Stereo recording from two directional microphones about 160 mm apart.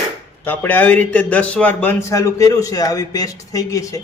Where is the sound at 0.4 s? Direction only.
10° left (ahead or behind).